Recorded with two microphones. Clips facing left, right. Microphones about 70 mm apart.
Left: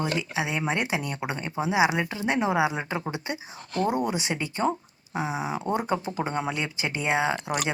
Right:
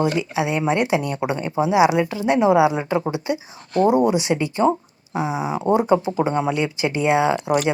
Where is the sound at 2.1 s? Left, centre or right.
Left.